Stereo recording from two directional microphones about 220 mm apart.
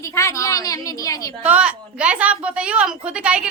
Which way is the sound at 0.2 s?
15° left (ahead or behind).